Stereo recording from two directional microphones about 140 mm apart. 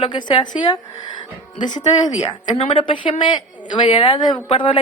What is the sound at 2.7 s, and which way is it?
A woman's voice, 35° left (ahead or behind).